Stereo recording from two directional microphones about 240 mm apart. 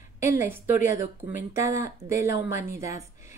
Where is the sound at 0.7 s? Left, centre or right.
Left.